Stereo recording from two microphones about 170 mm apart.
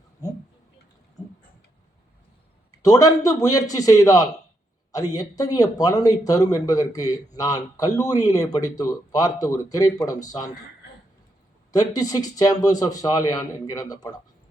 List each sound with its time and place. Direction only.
2.8 s speech: 20° left (ahead or behind)
11.7 s speech: 20° left (ahead or behind)